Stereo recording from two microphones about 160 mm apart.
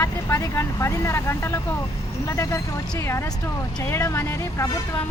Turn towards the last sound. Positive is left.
turn(degrees=15)  # may be behind; listen again after turning